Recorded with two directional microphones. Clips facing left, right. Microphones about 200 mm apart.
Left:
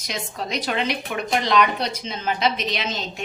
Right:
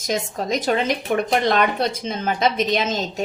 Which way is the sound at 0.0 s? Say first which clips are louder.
Right 6 dB; 45° right (ahead or behind).